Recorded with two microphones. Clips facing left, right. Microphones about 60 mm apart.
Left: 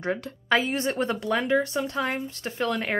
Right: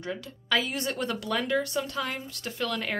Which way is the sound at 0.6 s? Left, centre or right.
Left.